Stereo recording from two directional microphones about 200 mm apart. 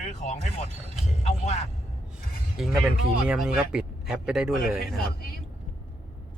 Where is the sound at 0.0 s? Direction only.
35° left (ahead or behind).